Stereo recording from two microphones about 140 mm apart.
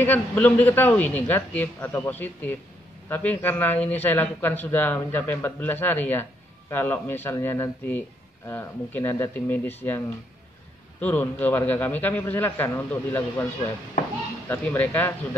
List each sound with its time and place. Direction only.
0.0 s a man's voice: 10° left (ahead or behind)
14.5 s a man's voice: 15° left (ahead or behind)